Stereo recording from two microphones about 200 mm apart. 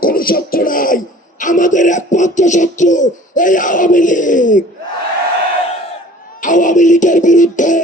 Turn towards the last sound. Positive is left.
turn(degrees=40)  # may be behind; listen again after turning